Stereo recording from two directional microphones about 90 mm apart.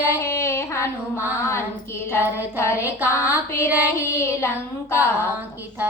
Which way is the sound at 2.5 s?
30° left (ahead or behind).